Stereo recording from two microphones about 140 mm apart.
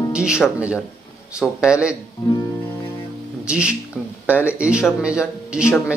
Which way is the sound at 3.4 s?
5° right (ahead or behind).